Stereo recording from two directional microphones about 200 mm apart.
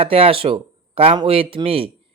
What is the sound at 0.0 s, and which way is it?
Speech, 30° right (ahead or behind).